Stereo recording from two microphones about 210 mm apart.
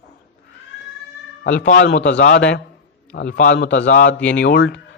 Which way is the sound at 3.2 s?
40° left (ahead or behind).